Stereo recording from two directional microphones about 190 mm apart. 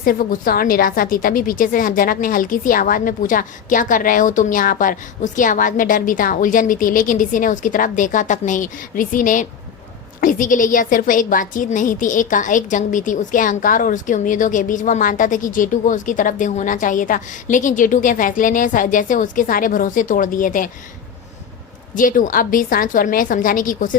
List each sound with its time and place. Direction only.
0.0 s a woman's voice: 50° left (ahead or behind)
21.9 s a woman's voice: 45° left (ahead or behind)